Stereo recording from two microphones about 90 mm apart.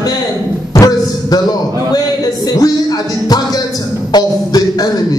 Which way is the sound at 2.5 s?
45° left (ahead or behind).